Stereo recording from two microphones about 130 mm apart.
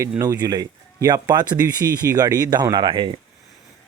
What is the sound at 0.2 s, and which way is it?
Speech, 30° right (ahead or behind).